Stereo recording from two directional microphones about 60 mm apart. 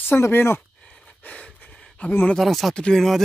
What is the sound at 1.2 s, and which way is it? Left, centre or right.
Speech, left.